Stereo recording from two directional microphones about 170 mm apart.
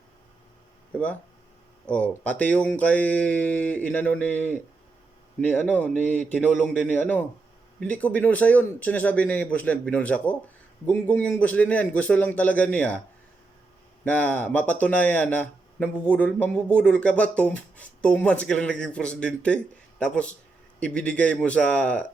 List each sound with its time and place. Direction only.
0.9 s speech: 10° left (ahead or behind)
5.6 s speech: 10° left (ahead or behind)
14.0 s speech: 10° left (ahead or behind)